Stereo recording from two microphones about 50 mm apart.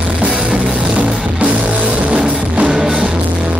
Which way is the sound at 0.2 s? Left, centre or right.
Centre.